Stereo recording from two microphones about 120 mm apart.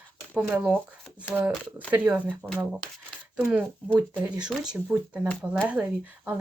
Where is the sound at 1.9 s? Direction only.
15° right (ahead or behind).